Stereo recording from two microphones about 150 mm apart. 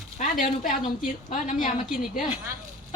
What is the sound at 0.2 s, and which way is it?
Speech, 60° left (ahead or behind).